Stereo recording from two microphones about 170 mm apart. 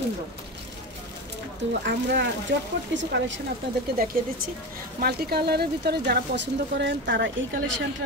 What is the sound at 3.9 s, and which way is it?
Speech, 55° right (ahead or behind).